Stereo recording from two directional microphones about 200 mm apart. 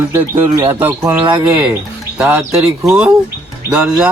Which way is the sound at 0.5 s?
25° right (ahead or behind).